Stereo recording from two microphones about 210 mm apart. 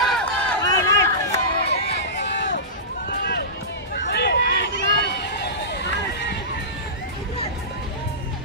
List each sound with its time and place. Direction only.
0.0 s run: centre (ahead or behind)
0.7 s run: 15° left (ahead or behind)
1.7 s a sound: 55° left (ahead or behind)
3.1 s run: 45° left (ahead or behind)